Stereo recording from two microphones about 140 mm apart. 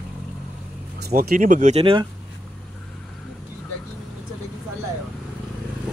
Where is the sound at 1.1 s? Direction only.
90° right; by 1.8 s 60° right (ahead or behind).